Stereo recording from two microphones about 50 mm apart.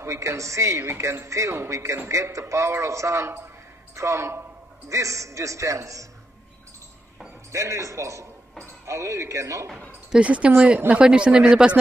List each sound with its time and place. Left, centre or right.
0.0 s a woman's voice: right
4.8 s a man's voice: right
7.5 s a man's voice: right
10.2 s speech: right